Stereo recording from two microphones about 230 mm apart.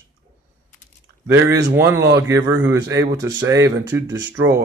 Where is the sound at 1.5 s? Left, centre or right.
Centre.